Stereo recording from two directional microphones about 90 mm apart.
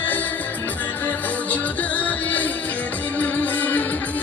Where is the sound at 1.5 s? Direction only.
15° left (ahead or behind).